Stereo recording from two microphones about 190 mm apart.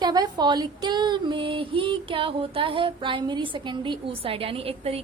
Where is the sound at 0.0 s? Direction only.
20° right (ahead or behind).